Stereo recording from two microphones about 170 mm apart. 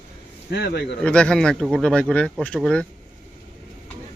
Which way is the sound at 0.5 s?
75° left (ahead or behind).